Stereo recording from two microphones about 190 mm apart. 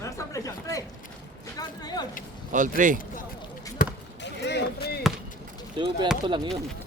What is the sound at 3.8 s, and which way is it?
Basketball bounce, 45° left (ahead or behind).